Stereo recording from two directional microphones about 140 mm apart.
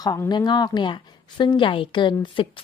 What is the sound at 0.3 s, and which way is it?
A woman's voice, 30° left (ahead or behind).